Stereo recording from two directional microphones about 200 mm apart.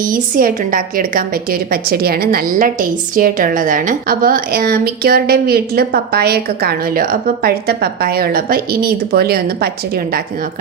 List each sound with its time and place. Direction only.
0.0 s a woman's voice: 45° right (ahead or behind)